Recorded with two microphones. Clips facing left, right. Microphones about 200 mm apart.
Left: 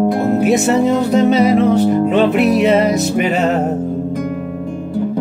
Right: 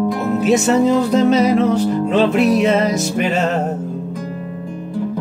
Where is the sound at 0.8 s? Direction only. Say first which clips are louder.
Left 1 dB; centre (ahead or behind).